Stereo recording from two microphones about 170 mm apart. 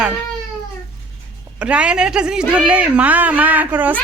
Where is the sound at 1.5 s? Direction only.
5° right (ahead or behind).